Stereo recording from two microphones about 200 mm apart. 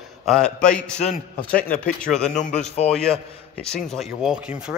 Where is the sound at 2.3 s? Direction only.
35° left (ahead or behind).